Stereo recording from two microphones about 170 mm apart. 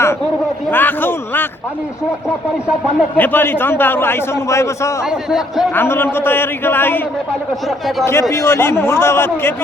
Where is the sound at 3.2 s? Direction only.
10° left (ahead or behind).